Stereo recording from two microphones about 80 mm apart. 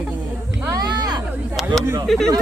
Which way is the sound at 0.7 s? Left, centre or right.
Right.